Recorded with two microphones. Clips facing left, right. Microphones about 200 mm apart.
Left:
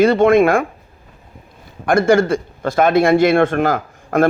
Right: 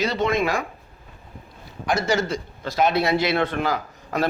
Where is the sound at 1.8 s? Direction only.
55° left (ahead or behind).